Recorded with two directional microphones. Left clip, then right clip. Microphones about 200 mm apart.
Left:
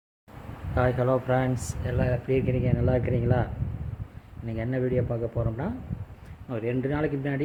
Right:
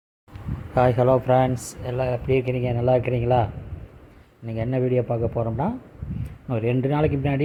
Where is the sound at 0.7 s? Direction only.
30° right (ahead or behind).